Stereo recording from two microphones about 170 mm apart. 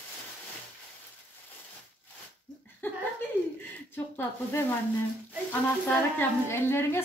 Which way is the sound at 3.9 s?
15° left (ahead or behind).